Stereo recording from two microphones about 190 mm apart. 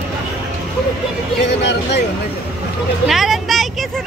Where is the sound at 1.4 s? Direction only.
65° left (ahead or behind).